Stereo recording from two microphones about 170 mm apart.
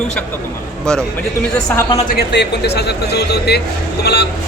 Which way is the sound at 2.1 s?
70° left (ahead or behind).